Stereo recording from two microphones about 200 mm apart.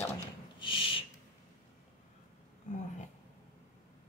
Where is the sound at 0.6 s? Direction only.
25° left (ahead or behind).